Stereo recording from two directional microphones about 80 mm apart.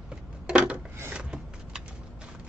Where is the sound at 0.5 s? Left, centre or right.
Centre.